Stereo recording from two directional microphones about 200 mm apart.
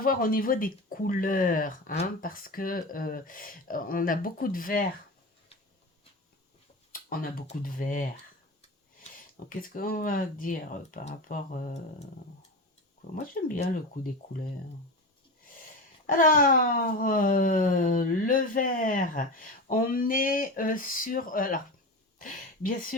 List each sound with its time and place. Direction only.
0.0 s speech: 45° left (ahead or behind)
6.9 s speech: 45° left (ahead or behind)
9.5 s speech: 45° left (ahead or behind)
13.1 s speech: 40° left (ahead or behind)
16.0 s speech: 45° left (ahead or behind)